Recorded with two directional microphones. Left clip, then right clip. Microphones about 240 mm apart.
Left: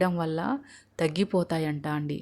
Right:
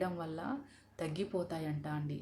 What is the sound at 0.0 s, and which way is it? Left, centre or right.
A woman's voice, left.